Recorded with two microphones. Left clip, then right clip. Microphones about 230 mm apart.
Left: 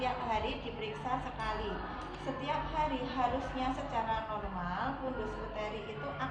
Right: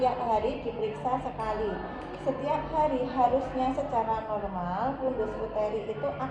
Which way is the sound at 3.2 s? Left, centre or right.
Centre.